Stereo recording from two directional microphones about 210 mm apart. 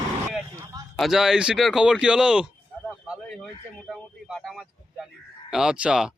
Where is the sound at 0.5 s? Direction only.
15° right (ahead or behind).